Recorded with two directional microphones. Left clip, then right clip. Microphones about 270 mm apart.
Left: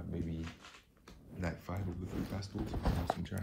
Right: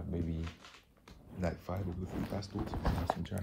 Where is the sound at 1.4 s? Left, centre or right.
Centre.